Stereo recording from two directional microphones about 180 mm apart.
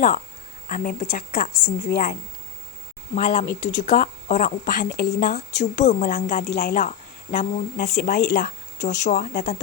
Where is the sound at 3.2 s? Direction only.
45° left (ahead or behind).